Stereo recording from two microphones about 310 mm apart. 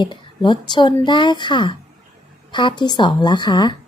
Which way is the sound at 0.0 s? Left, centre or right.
Centre.